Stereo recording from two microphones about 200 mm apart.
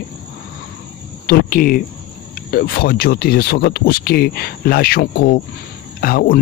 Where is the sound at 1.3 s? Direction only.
45° left (ahead or behind).